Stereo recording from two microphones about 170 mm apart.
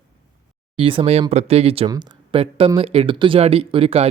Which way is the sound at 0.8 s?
30° right (ahead or behind).